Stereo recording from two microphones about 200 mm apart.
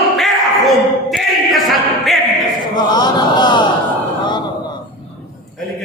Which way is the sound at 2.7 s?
20° left (ahead or behind).